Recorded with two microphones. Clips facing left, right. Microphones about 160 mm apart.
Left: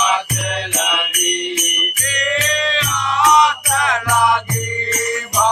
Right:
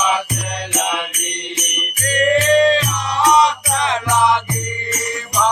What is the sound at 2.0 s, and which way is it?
Music, 45° right (ahead or behind).